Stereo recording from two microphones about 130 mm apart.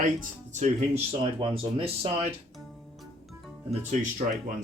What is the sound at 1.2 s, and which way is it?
Speech, 40° right (ahead or behind).